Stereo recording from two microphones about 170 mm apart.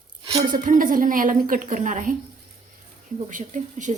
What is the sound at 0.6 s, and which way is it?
A woman's voice, 50° right (ahead or behind).